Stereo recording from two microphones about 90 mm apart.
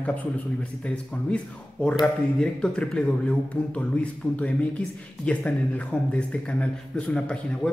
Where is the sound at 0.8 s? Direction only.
15° left (ahead or behind).